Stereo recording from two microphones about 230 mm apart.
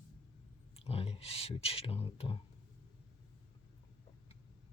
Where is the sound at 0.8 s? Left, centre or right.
Left.